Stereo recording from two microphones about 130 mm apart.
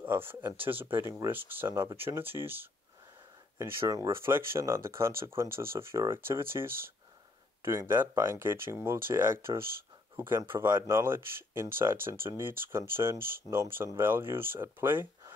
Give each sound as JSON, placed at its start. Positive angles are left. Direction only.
{"t": 0.0, "sound": "speech", "side_deg": -15}